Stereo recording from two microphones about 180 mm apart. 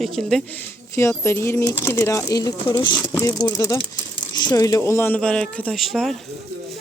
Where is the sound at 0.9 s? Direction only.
15° left (ahead or behind).